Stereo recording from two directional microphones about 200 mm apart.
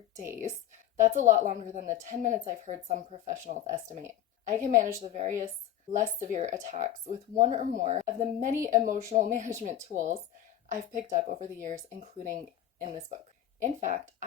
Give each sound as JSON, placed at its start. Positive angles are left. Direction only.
{"t": 0.1, "sound": "speech", "side_deg": -10}
{"t": 0.9, "sound": "a woman's voice", "side_deg": -40}
{"t": 13.6, "sound": "a woman's voice", "side_deg": -40}